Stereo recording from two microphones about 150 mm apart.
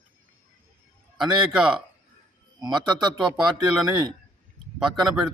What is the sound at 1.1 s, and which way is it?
Speech, 5° right (ahead or behind).